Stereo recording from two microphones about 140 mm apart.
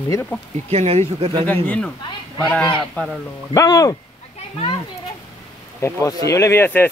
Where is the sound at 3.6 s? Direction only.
25° left (ahead or behind).